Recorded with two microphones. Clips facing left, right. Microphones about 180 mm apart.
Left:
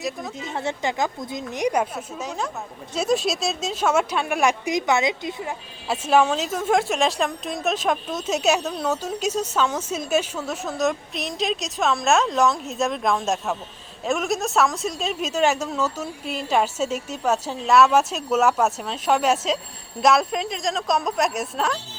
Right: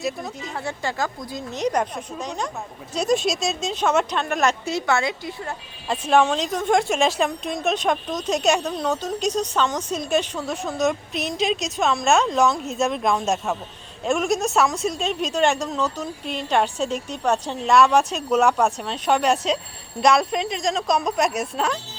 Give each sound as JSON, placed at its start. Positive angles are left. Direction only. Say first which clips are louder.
{"t": 0.0, "sound": "a woman's voice", "louder": "right 1 dB", "side_deg": 0}
{"t": 0.5, "sound": "a woman's voice", "louder": "left 3 dB", "side_deg": 20}